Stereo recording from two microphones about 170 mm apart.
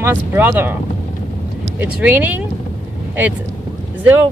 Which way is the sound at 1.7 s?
10° right (ahead or behind).